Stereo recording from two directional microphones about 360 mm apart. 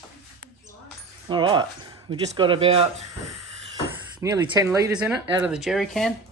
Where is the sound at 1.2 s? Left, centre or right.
Centre.